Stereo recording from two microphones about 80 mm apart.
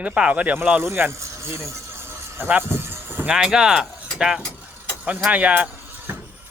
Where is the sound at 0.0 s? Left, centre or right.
Centre.